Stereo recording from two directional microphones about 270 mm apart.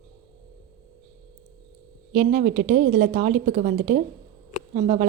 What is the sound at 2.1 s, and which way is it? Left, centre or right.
Speech, right.